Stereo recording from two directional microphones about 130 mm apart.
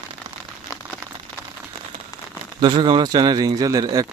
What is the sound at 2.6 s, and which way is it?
A man's voice, 35° right (ahead or behind).